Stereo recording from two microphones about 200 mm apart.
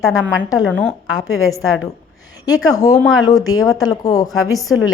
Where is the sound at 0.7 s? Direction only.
5° left (ahead or behind).